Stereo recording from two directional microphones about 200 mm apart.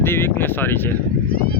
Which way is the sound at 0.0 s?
10° left (ahead or behind).